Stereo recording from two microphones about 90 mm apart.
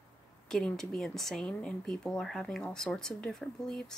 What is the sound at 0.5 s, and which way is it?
Speech, 5° left (ahead or behind).